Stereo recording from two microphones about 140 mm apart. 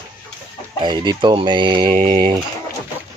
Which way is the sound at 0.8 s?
35° right (ahead or behind).